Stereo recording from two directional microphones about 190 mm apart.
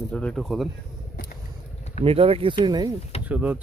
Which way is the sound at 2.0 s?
30° right (ahead or behind).